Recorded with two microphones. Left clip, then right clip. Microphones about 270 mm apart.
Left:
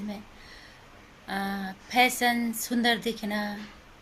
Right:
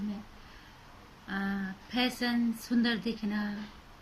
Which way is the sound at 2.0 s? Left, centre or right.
Left.